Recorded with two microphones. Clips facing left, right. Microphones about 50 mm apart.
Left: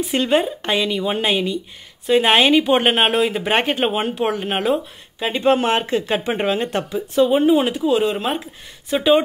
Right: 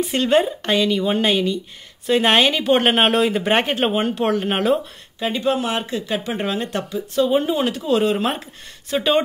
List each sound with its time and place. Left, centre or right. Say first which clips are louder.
0.2 s speech: right 2 dB; centre
5.2 s speech: left 2 dB; left
5.5 s speech: left 7 dB; left; by 7.8 s centre
7.8 s speech: even; centre